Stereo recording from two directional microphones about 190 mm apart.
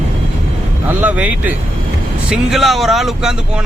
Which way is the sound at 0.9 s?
10° right (ahead or behind).